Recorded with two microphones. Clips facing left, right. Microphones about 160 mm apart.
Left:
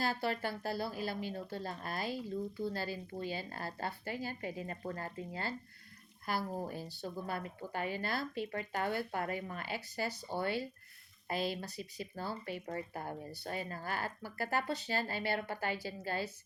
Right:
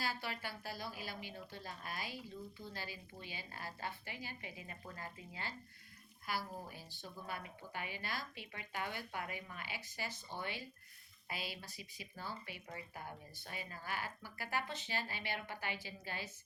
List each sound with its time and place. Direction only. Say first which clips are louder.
0.0 s a woman's voice: left 8 dB; 45° left (ahead or behind)